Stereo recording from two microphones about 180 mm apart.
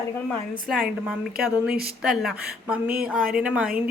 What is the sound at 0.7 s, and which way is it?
A woman's voice, centre (ahead or behind).